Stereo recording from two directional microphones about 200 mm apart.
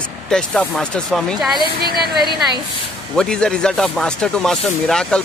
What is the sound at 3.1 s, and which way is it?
Speech, 5° left (ahead or behind).